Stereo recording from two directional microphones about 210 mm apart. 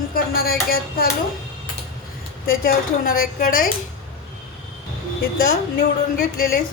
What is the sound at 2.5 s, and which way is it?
Speech, 45° left (ahead or behind).